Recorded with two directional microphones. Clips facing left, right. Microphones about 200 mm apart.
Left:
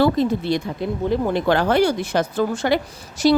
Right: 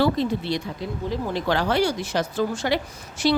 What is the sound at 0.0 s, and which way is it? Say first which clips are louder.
A woman's voice: left 4 dB; 50° left (ahead or behind).